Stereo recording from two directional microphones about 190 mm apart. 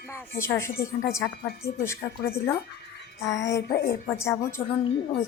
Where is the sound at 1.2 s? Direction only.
55° left (ahead or behind).